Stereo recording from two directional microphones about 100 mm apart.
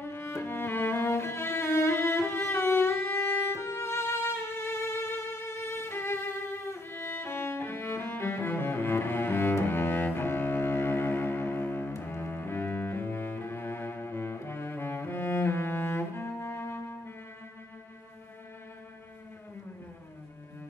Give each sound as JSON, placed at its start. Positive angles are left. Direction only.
{"t": 0.0, "sound": "cello", "side_deg": 25}